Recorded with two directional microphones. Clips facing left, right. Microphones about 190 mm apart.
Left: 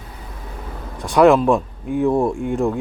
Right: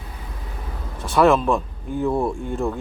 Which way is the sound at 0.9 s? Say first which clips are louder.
Left 4 dB; 15° left (ahead or behind).